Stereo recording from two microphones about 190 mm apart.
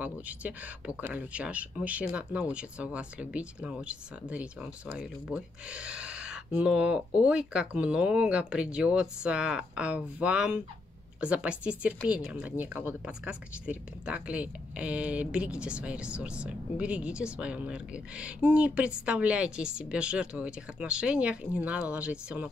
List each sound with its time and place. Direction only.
0.0 s speech: 10° right (ahead or behind)